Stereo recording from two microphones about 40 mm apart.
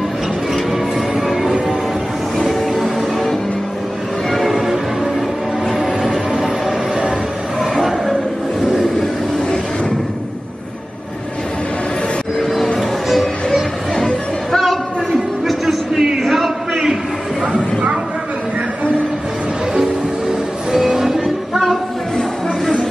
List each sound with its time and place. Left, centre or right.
1.1 s change ringing: centre
2.3 s music: centre
7.7 s a sound: centre
12.7 s music: centre
13.9 s chatter: centre
15.4 s music: centre
16.2 s a sound: centre
17.5 s a sound: right
19.7 s music: centre
21.5 s music: centre